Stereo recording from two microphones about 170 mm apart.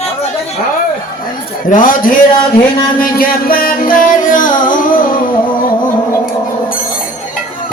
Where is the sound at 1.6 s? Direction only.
55° left (ahead or behind).